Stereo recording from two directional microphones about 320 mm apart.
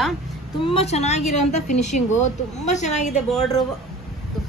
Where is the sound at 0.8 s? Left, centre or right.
Centre.